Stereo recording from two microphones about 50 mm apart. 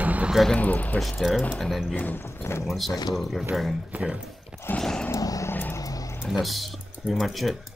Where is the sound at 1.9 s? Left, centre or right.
Left.